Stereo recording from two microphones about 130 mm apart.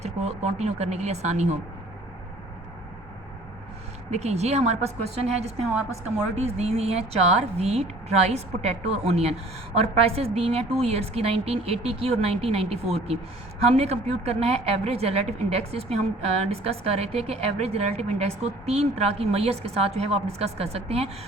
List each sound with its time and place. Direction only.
0.0 s a woman's voice: 60° right (ahead or behind)
4.1 s a woman's voice: 55° right (ahead or behind)